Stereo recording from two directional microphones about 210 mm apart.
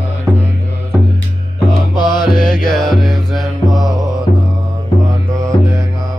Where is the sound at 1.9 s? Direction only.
20° left (ahead or behind).